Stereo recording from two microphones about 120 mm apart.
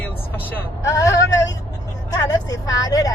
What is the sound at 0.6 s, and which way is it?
A woman's voice, 25° left (ahead or behind).